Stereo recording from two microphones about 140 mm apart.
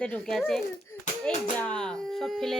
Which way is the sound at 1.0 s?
60° left (ahead or behind).